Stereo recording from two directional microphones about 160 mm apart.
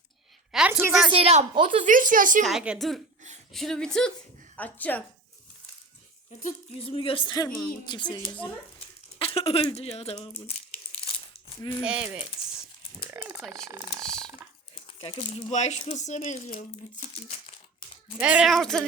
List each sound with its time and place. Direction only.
0.7 s speech: 15° right (ahead or behind)
1.1 s a woman's voice: 40° right (ahead or behind)
1.8 s speech: 55° right (ahead or behind)
2.4 s speech: centre (ahead or behind)
6.7 s speech: 35° left (ahead or behind)
9.1 s speech: 35° left (ahead or behind)
11.0 s crumpling: 35° left (ahead or behind)
11.8 s speech: 5° right (ahead or behind)
13.1 s frog: 10° right (ahead or behind)
13.7 s speech: 10° right (ahead or behind)
14.0 s a sound: 5° left (ahead or behind)
14.8 s speech: 35° left (ahead or behind)
18.2 s speech: 10° right (ahead or behind)